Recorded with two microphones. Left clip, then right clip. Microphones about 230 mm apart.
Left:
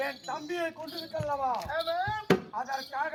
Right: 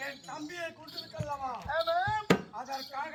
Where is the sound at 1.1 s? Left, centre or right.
Left.